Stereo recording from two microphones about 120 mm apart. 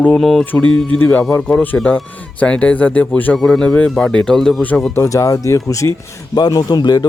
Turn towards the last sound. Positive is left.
turn(degrees=35)  # may be behind; listen again after turning